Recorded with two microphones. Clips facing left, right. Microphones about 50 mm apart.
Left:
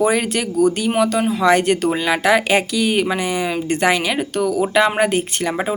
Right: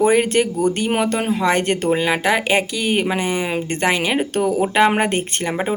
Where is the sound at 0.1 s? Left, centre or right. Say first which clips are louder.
Right 4 dB; centre.